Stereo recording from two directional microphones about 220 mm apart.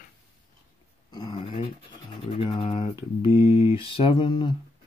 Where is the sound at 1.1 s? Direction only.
20° left (ahead or behind).